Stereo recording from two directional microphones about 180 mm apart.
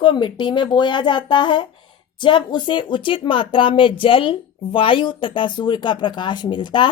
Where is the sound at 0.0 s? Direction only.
25° left (ahead or behind).